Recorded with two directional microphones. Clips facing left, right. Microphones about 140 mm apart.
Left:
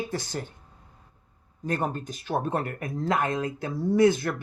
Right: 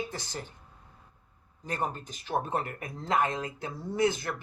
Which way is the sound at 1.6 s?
50° left (ahead or behind).